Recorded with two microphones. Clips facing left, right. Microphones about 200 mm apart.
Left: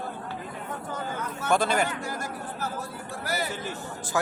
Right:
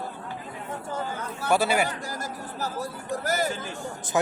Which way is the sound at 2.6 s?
40° right (ahead or behind).